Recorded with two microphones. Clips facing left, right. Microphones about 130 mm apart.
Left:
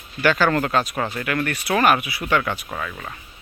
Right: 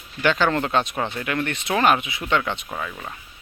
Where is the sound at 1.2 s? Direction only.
20° right (ahead or behind).